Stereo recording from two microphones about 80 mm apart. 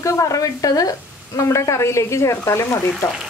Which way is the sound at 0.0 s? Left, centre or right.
Left.